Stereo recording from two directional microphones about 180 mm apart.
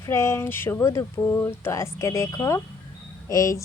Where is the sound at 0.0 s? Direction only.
15° left (ahead or behind).